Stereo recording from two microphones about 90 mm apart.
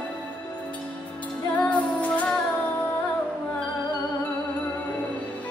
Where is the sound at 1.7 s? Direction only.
15° left (ahead or behind).